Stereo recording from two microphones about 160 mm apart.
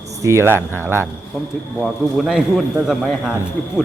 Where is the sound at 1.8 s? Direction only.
Centre (ahead or behind).